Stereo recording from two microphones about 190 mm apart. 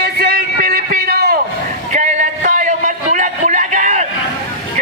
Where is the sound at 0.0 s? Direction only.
55° right (ahead or behind).